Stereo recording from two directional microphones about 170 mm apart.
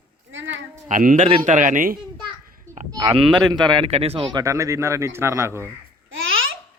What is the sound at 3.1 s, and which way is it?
Speech, 30° right (ahead or behind).